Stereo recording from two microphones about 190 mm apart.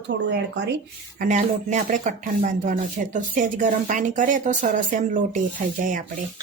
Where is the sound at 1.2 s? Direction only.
40° right (ahead or behind).